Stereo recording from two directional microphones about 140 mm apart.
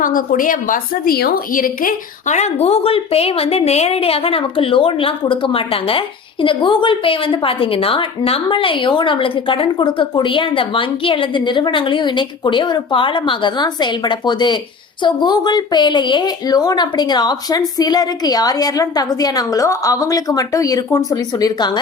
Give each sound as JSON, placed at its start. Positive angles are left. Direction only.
{"t": 0.0, "sound": "a woman's voice", "side_deg": 75}